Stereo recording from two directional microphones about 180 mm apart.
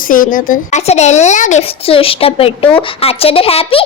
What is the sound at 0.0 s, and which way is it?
A child's voice, 50° left (ahead or behind).